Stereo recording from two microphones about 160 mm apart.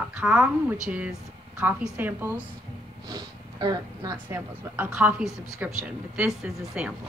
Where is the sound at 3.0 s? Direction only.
25° right (ahead or behind).